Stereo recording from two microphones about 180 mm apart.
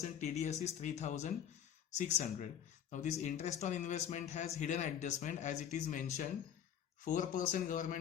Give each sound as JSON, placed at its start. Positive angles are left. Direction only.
{"t": 0.0, "sound": "a man's voice", "side_deg": 40}